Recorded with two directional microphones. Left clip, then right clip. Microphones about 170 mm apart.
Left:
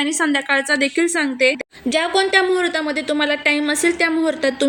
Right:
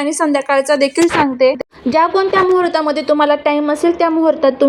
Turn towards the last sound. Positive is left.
turn(degrees=5)  # may be behind; listen again after turning